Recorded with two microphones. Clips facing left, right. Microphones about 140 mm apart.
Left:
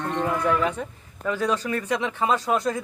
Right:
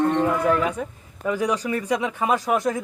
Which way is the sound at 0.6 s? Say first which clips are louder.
Right 1 dB; 10° right (ahead or behind).